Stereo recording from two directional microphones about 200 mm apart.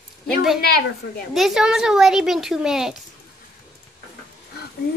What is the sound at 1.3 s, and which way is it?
Speech, centre (ahead or behind).